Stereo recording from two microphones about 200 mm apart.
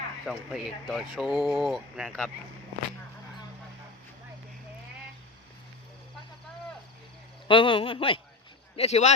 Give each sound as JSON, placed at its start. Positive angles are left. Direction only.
{"t": 0.3, "sound": "speech", "side_deg": 0}
{"t": 7.4, "sound": "a man's voice", "side_deg": 25}